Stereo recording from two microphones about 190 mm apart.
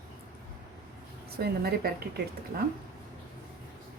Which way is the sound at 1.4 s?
55° right (ahead or behind).